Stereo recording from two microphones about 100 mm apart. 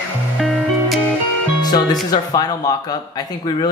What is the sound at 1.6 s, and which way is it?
Speech, 45° left (ahead or behind).